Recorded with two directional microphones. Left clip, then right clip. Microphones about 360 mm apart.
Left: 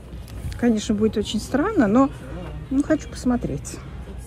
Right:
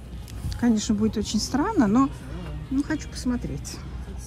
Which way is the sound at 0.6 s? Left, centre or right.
Centre.